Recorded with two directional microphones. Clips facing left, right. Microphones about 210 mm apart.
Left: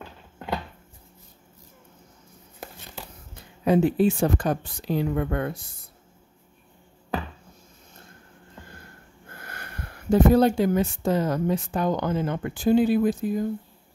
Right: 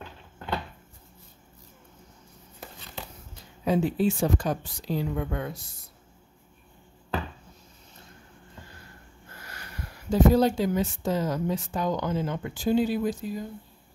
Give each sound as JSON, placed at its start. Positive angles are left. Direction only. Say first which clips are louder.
{"t": 3.3, "sound": "speech", "louder": "left 5 dB", "side_deg": 60}
{"t": 9.3, "sound": "speech", "louder": "left 4 dB", "side_deg": 55}